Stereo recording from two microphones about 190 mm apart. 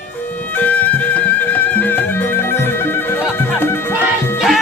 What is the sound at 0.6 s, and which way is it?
Music, 10° left (ahead or behind).